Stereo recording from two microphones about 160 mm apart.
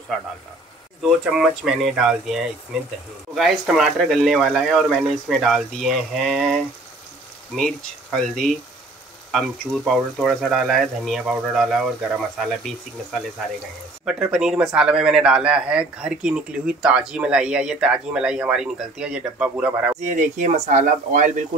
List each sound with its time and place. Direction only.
1.0 s speech: 5° right (ahead or behind)
9.8 s speech: centre (ahead or behind)
20.1 s speech: 50° right (ahead or behind)